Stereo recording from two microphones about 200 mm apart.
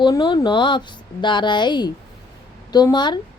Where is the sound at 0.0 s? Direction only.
20° left (ahead or behind).